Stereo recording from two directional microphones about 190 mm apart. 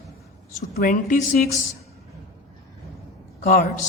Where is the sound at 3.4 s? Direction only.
45° left (ahead or behind).